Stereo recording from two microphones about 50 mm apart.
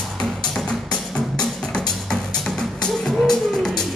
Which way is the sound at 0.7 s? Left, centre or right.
Centre.